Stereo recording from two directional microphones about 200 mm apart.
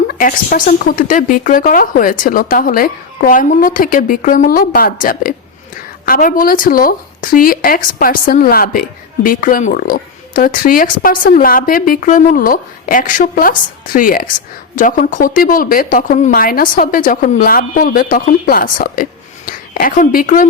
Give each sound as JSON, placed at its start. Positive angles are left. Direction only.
{"t": 0.1, "sound": "a woman's voice", "side_deg": 45}